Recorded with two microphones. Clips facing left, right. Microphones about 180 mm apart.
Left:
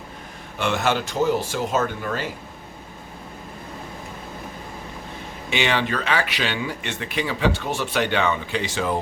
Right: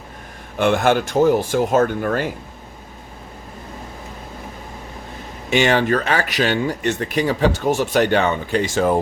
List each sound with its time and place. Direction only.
0.6 s speech: 50° right (ahead or behind)
5.5 s speech: 45° right (ahead or behind)